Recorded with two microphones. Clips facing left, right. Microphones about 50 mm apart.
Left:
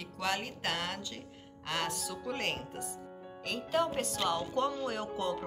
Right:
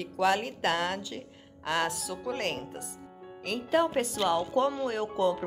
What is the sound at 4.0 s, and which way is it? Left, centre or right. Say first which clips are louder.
Speech: right 5 dB; centre.